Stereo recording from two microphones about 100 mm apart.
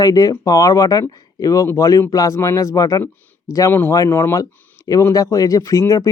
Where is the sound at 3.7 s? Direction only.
20° left (ahead or behind).